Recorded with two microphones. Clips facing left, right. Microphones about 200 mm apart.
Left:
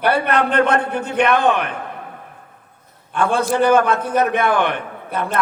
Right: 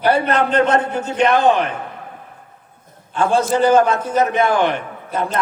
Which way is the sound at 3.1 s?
60° left (ahead or behind).